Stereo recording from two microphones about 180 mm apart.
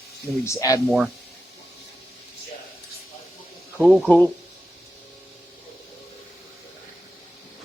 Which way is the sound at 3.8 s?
5° right (ahead or behind).